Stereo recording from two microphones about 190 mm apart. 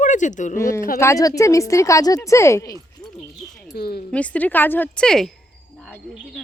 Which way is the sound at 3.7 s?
55° left (ahead or behind).